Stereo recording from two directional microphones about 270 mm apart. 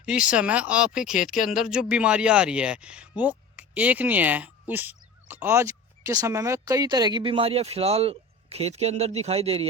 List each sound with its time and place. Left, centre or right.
0.0 s speech: centre; by 9.6 s right